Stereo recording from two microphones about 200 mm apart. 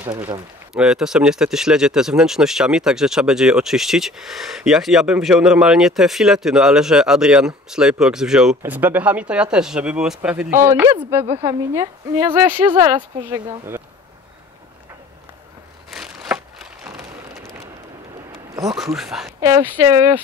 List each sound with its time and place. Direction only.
0.0 s a woman's voice: 15° right (ahead or behind)
0.7 s a woman's voice: 5° right (ahead or behind)
15.9 s a sound: centre (ahead or behind)
18.3 s a sound: 15° right (ahead or behind)
18.9 s speech: centre (ahead or behind)
19.4 s a woman's voice: 15° right (ahead or behind)